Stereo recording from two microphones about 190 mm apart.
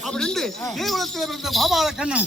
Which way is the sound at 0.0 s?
5° left (ahead or behind).